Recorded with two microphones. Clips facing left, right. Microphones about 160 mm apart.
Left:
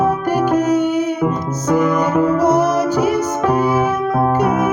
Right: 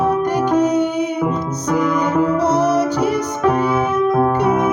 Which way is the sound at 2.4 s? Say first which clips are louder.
Left 1 dB; 10° left (ahead or behind).